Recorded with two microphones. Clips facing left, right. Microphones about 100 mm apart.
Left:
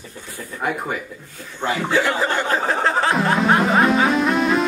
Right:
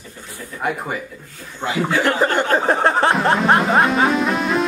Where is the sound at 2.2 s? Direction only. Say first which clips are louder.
Right 3 dB; 50° right (ahead or behind).